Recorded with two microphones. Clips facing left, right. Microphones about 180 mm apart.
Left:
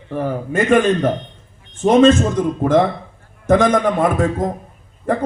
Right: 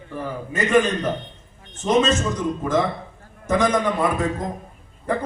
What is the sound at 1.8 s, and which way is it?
A man's voice, 55° left (ahead or behind).